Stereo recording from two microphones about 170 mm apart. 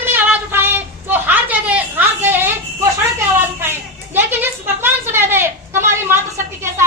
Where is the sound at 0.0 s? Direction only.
10° right (ahead or behind).